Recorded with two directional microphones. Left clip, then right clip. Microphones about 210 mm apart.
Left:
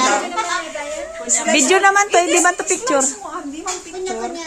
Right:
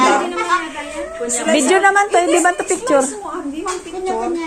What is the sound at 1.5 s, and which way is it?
A woman's voice, 20° left (ahead or behind).